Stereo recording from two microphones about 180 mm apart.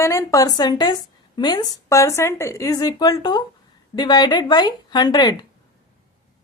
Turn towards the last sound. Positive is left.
turn(degrees=20)  # may be behind; listen again after turning